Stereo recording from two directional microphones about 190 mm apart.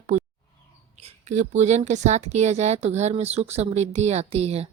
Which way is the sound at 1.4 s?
35° right (ahead or behind).